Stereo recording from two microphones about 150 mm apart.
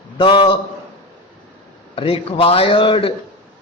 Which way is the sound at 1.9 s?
35° left (ahead or behind).